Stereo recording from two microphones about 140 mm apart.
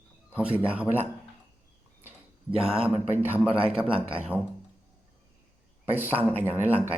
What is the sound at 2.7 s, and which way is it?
Speech, 5° right (ahead or behind).